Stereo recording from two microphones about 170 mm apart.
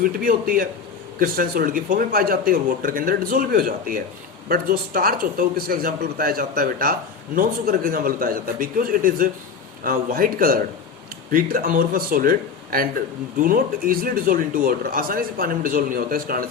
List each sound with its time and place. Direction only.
0.0 s speech: 55° right (ahead or behind)